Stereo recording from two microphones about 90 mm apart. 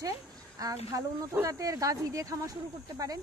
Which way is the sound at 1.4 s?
40° right (ahead or behind).